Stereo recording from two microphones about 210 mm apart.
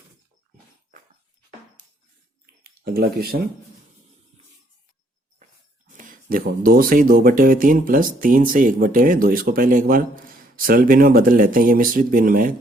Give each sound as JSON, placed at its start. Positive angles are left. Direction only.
{"t": 2.8, "sound": "speech", "side_deg": -45}
{"t": 6.0, "sound": "speech", "side_deg": -40}